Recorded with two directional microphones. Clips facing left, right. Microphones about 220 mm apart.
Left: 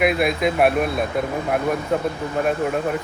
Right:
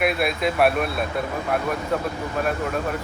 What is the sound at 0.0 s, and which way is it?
Speech, 20° left (ahead or behind).